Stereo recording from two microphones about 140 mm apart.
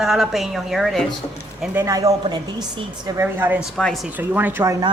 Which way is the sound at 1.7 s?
25° right (ahead or behind).